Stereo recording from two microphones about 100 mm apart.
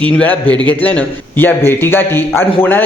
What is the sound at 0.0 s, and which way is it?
A man's voice, 15° left (ahead or behind).